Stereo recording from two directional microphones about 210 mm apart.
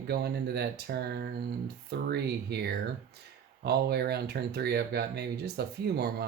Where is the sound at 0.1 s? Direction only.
50° right (ahead or behind).